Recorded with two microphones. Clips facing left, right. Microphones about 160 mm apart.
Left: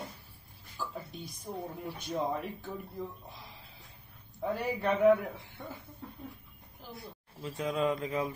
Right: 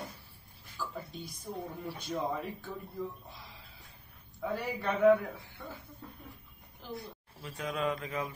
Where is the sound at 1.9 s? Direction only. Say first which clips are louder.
Left 2 dB; 15° left (ahead or behind).